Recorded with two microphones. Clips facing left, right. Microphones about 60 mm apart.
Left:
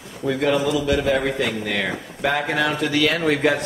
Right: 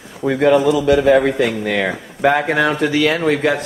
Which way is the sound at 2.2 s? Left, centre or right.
Centre.